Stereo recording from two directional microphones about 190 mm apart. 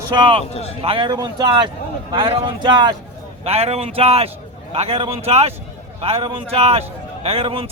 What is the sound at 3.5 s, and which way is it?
A man's voice, 35° right (ahead or behind).